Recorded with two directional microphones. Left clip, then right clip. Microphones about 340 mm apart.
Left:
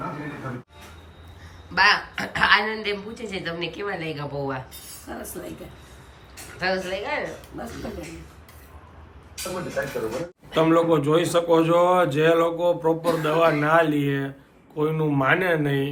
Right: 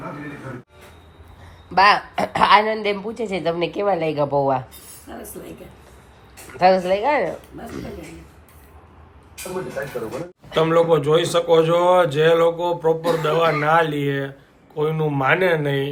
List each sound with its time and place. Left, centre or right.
1.7 s a woman's voice: centre
5.0 s a man's voice: centre
6.6 s a woman's voice: centre
10.5 s a man's voice: centre